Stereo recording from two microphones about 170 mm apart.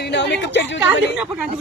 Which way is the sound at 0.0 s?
90° left.